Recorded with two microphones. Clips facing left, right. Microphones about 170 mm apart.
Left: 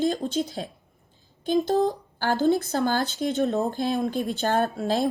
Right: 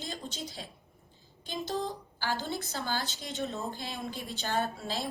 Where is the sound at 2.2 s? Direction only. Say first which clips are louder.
Left 13 dB; 55° left (ahead or behind).